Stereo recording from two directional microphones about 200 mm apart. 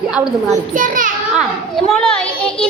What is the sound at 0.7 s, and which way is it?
Speech, 40° right (ahead or behind).